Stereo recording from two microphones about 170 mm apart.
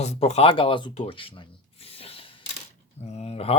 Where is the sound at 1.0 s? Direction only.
30° left (ahead or behind).